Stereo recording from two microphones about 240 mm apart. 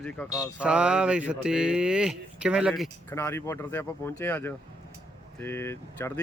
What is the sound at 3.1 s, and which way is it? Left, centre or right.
Speech, centre.